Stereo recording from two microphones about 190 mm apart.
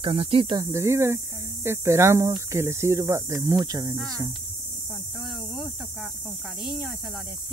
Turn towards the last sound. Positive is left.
turn(degrees=0)  # may be behind; listen again after turning